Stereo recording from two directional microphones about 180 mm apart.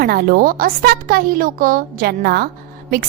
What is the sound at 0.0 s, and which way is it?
A woman's voice, 60° right (ahead or behind).